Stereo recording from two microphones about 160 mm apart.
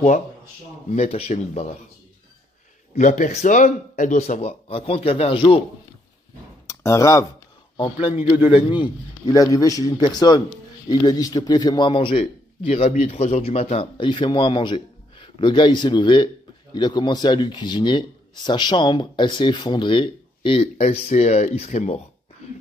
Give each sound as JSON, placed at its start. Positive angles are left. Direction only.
{"t": 0.8, "sound": "speech", "side_deg": 40}
{"t": 3.0, "sound": "speech", "side_deg": 50}
{"t": 6.7, "sound": "speech", "side_deg": 20}
{"t": 7.7, "sound": "a man's voice", "side_deg": 35}